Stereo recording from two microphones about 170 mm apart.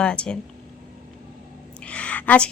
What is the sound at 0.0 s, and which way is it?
Speech, 5° left (ahead or behind).